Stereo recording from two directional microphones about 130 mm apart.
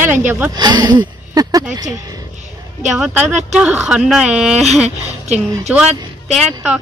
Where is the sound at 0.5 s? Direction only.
30° right (ahead or behind).